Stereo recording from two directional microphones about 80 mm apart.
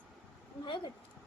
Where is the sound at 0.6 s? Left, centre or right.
Left.